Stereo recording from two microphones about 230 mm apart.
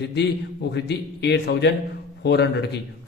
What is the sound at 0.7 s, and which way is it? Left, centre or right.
A man's voice, left.